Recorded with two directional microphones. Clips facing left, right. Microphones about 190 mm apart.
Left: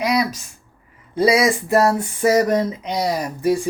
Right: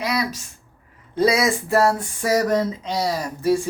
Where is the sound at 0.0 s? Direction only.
15° left (ahead or behind).